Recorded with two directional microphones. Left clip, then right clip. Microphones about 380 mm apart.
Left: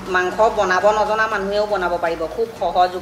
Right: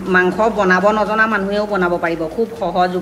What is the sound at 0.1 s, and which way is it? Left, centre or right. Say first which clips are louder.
A woman's voice: right 2 dB; centre.